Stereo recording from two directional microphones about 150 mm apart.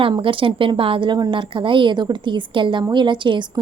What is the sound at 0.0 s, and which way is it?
A woman's voice, 35° right (ahead or behind).